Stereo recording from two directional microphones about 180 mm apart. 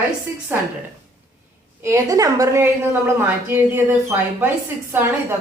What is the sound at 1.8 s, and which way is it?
A woman's voice, 15° right (ahead or behind).